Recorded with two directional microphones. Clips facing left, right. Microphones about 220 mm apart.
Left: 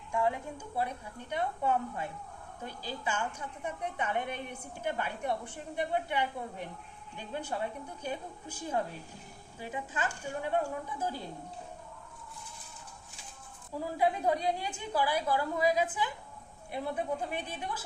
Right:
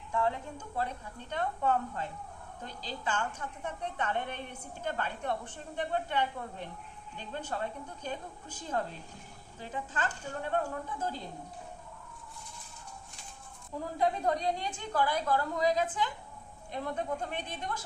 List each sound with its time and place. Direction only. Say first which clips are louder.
0.1 s a woman's voice: left 1 dB; 15° left (ahead or behind)
13.7 s a woman's voice: left 1 dB; 10° left (ahead or behind)